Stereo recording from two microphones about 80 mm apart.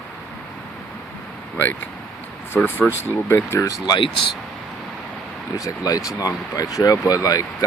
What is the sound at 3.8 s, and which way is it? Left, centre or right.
Speech, left.